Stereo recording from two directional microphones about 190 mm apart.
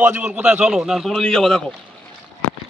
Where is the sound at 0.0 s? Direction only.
10° right (ahead or behind).